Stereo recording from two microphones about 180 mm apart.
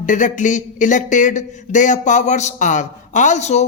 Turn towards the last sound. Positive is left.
turn(degrees=40)  # may be behind; listen again after turning